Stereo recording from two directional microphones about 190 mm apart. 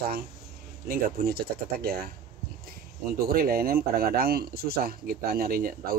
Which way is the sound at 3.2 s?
50° right (ahead or behind).